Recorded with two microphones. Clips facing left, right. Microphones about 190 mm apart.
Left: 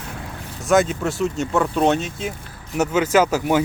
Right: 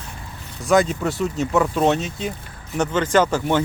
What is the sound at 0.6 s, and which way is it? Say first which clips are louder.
Speech: even; centre (ahead or behind).